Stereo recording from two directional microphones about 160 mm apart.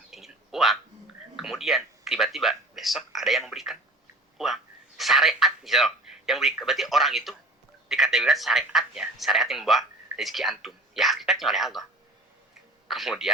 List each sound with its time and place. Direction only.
0.1 s a sound: centre (ahead or behind)
1.4 s a man's voice: centre (ahead or behind)
12.9 s speech: centre (ahead or behind)